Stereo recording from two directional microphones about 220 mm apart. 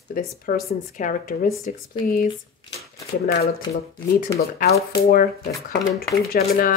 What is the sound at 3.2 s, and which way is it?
Speech, 45° left (ahead or behind).